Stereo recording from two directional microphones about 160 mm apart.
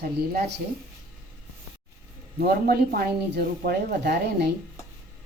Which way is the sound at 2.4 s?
75° right (ahead or behind).